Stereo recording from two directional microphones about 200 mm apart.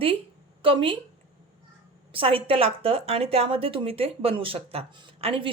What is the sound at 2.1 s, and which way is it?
A woman's voice, 25° right (ahead or behind).